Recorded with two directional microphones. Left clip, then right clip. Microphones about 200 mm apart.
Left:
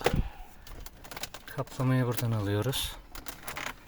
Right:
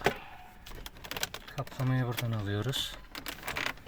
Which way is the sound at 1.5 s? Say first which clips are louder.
Left 4 dB; 55° left (ahead or behind).